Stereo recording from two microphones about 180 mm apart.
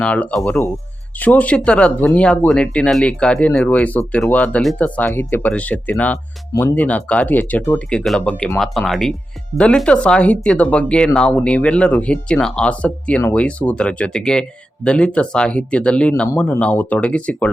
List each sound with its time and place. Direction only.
0.0 s speech: 5° left (ahead or behind)
6.5 s speech: 20° left (ahead or behind)
6.7 s speech: 10° left (ahead or behind)